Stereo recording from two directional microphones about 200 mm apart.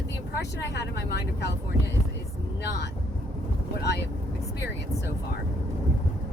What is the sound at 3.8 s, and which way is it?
Speech, 55° left (ahead or behind).